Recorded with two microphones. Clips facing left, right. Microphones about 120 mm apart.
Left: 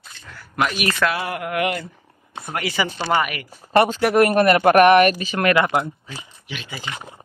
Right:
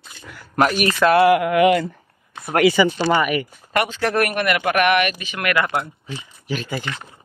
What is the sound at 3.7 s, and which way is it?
Speech, 30° left (ahead or behind).